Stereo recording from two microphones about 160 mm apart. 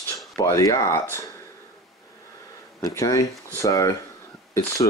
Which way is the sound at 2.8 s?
20° left (ahead or behind).